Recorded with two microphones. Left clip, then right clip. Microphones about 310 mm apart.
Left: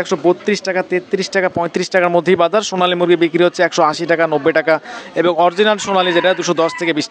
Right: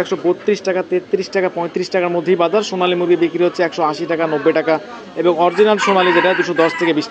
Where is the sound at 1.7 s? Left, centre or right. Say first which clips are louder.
Left 3 dB; left.